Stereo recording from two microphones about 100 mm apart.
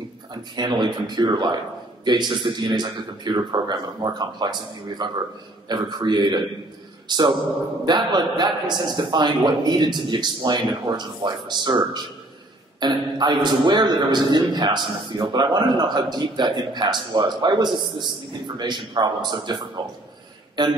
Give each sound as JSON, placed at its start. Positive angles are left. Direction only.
{"t": 0.6, "sound": "a man's voice", "side_deg": -50}